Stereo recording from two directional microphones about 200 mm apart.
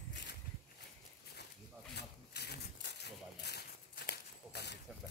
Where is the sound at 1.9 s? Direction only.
55° left (ahead or behind).